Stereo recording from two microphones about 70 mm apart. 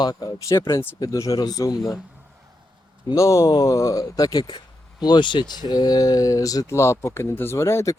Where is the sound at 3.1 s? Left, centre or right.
Left.